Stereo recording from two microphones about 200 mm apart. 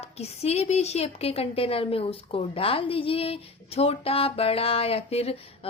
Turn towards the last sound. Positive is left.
turn(degrees=30)  # may be behind; listen again after turning